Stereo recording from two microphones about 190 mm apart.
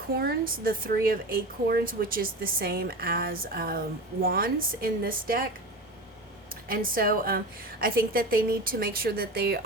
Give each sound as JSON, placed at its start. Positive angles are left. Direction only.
{"t": 0.2, "sound": "a woman's voice", "side_deg": -50}
{"t": 6.5, "sound": "a woman's voice", "side_deg": -50}